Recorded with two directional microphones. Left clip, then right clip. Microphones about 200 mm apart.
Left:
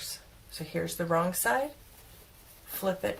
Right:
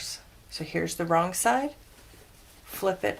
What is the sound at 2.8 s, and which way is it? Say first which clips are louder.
Speech: right 4 dB; 40° right (ahead or behind).